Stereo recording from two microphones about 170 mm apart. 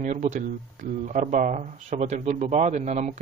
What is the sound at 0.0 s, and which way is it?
Speech, 40° right (ahead or behind).